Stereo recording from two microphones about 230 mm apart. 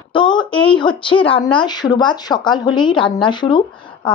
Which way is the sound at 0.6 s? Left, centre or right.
Left.